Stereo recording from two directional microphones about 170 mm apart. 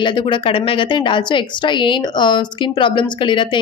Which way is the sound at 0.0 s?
30° left (ahead or behind).